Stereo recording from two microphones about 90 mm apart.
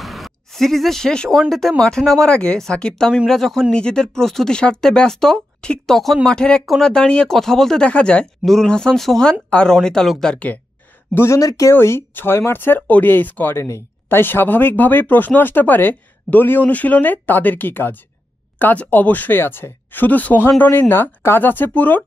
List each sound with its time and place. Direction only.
0.0 s a sound: centre (ahead or behind)
1.5 s speech: 5° left (ahead or behind)
11.1 s speech: 35° left (ahead or behind)
11.7 s speech: 25° left (ahead or behind)